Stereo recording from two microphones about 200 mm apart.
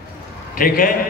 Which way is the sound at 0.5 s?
45° left (ahead or behind).